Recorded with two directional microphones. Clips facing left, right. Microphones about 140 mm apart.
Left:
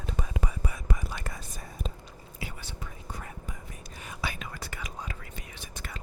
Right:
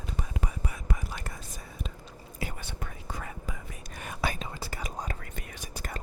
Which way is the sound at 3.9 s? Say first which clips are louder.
Right 4 dB; 55° right (ahead or behind).